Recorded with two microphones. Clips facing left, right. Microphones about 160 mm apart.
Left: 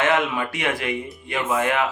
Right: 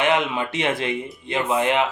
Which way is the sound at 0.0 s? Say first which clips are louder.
Even; 20° right (ahead or behind).